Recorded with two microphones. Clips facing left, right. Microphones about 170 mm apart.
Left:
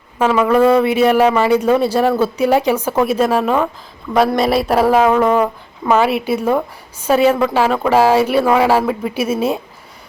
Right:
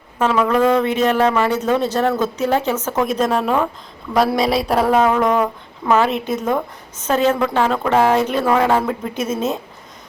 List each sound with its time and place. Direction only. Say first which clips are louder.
0.2 s speech: left 3 dB; 5° left (ahead or behind)